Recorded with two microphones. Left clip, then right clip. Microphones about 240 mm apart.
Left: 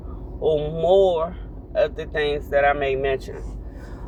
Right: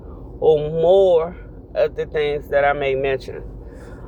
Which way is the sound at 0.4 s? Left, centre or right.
Right.